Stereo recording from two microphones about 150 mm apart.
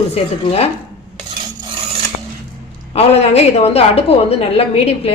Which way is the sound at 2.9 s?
45° left (ahead or behind).